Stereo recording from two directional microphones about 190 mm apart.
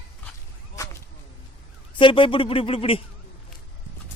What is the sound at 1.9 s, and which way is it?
Speech, 25° left (ahead or behind).